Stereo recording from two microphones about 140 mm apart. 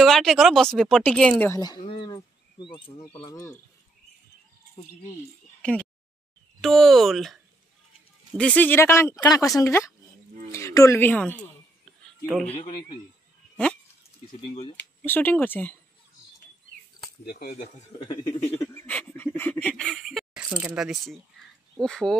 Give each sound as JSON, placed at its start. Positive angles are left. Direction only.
{"t": 0.0, "sound": "speech", "side_deg": 0}
{"t": 1.5, "sound": "speech", "side_deg": 30}
{"t": 3.3, "sound": "speech", "side_deg": 25}
{"t": 5.6, "sound": "a sound", "side_deg": 10}
{"t": 6.6, "sound": "speech", "side_deg": 0}
{"t": 8.4, "sound": "speech", "side_deg": 10}
{"t": 15.0, "sound": "speech", "side_deg": 15}
{"t": 17.3, "sound": "speech", "side_deg": 65}
{"t": 17.9, "sound": "speech", "side_deg": 30}
{"t": 18.6, "sound": "a sound", "side_deg": 15}
{"t": 21.7, "sound": "speech", "side_deg": 5}